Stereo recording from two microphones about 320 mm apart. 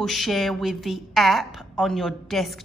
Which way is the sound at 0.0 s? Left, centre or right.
Centre.